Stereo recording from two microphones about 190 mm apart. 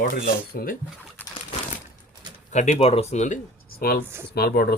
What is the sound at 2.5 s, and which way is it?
Speech, 35° left (ahead or behind).